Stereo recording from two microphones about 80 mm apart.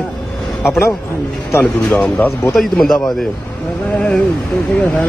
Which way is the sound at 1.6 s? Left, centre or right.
Centre.